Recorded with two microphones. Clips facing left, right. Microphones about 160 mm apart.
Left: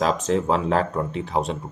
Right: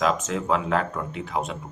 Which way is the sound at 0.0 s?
35° left (ahead or behind).